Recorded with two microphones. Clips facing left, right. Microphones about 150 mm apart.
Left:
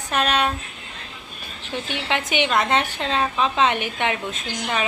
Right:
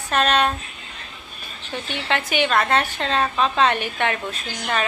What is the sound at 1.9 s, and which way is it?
A woman's voice, 15° left (ahead or behind).